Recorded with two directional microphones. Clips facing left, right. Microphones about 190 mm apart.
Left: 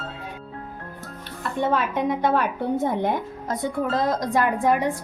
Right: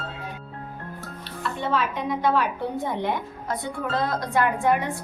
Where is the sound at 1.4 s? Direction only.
50° left (ahead or behind).